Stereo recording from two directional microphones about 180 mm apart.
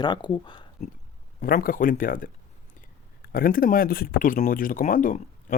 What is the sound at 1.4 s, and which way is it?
Speech, 50° left (ahead or behind).